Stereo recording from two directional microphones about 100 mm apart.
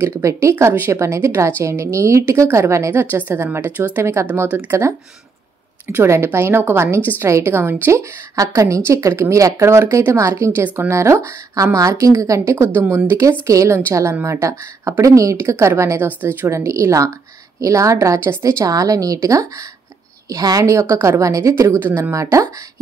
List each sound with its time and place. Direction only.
0.0 s a woman's voice: 30° right (ahead or behind)
4.5 s speech: 15° right (ahead or behind)
5.9 s a woman's voice: 25° right (ahead or behind)
22.1 s speech: 35° right (ahead or behind)